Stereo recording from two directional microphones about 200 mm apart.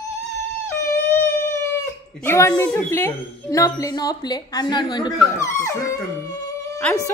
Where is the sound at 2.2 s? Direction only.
15° left (ahead or behind).